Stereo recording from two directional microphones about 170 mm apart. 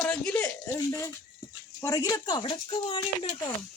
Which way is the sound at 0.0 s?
10° left (ahead or behind).